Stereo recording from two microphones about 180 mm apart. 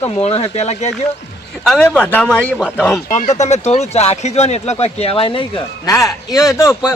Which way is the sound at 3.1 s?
40° left (ahead or behind).